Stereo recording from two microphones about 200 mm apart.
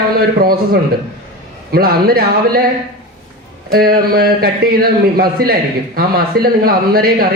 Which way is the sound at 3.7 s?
50° right (ahead or behind).